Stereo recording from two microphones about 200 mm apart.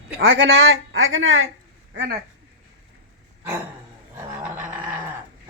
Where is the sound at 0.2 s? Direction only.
75° right (ahead or behind); by 1.5 s 90° right.